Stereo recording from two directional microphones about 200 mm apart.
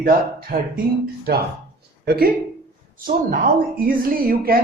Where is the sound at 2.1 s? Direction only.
50° right (ahead or behind).